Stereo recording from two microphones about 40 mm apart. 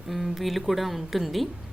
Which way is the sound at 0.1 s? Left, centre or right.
Centre.